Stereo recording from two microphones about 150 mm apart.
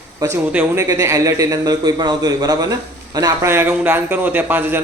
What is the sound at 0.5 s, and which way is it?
A man's voice, 20° right (ahead or behind).